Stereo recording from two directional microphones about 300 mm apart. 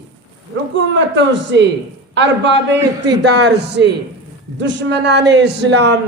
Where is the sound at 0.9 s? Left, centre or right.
Right.